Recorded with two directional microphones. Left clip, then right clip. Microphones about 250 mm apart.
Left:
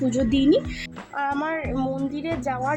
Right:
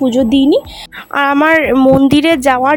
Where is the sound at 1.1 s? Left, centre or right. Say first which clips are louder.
Right 16 dB; right.